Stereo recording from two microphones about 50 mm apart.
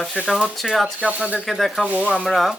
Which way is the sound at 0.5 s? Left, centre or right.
Centre.